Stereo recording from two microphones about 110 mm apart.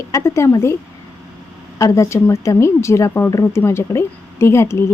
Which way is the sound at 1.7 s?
30° left (ahead or behind).